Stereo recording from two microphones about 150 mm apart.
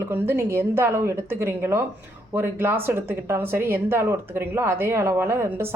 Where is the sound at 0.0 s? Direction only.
15° right (ahead or behind).